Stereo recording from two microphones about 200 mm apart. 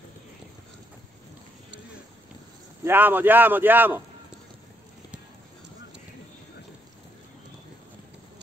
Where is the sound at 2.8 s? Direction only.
10° right (ahead or behind).